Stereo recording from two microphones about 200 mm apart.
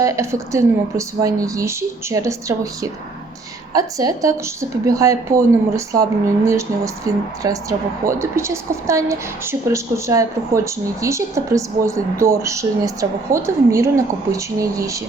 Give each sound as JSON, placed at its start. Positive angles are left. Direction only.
{"t": 0.0, "sound": "a woman's voice", "side_deg": -15}